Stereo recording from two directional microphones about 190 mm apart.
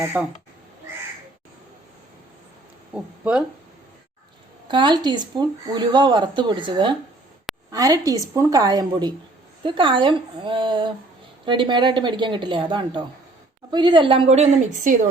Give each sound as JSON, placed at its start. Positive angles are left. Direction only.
{"t": 0.0, "sound": "speech", "side_deg": -10}
{"t": 2.9, "sound": "speech", "side_deg": -5}
{"t": 4.7, "sound": "speech", "side_deg": -25}